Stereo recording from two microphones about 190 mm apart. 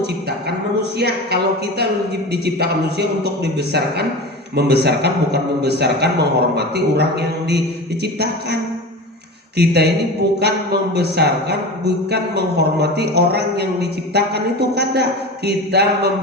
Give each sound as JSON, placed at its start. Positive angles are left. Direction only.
{"t": 0.0, "sound": "a man's voice", "side_deg": -60}
{"t": 9.6, "sound": "a man's voice", "side_deg": -60}